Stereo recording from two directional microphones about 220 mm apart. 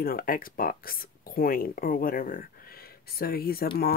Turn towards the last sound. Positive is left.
turn(degrees=45)  # may be behind; listen again after turning